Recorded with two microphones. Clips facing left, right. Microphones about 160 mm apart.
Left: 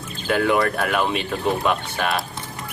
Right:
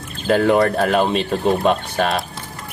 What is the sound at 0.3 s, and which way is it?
Speech, 35° right (ahead or behind).